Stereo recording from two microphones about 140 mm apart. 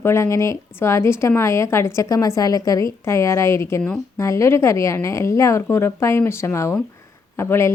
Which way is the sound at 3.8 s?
10° left (ahead or behind).